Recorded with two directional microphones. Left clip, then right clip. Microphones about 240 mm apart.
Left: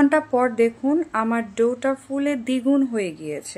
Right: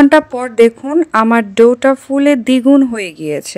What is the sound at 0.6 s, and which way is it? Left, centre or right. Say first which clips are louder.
Speech: right 10 dB; right.